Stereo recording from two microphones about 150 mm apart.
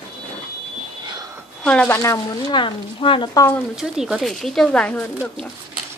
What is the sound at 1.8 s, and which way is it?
Speech, 20° left (ahead or behind).